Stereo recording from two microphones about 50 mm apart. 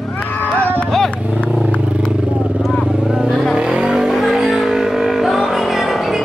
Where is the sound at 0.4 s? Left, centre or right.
Left.